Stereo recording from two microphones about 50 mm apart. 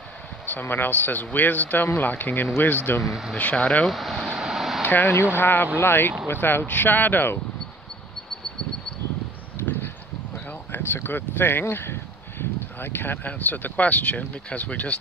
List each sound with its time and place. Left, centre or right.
0.5 s speech: left
3.0 s speech: centre
3.5 s speech: left
3.8 s speech: centre
4.4 s vehicle: centre
4.8 s speech: left
10.7 s speech: left
11.6 s speech: left